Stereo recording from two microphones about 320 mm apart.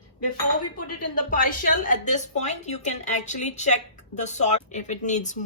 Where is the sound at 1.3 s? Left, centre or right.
Left.